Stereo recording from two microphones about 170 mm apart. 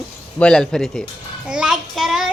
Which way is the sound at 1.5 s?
5° right (ahead or behind).